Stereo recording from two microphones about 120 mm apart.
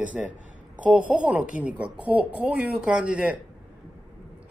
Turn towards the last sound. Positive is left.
turn(degrees=-10)  # may be behind; listen again after turning